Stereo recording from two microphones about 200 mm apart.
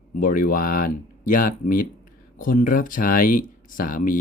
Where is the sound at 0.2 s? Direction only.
45° left (ahead or behind).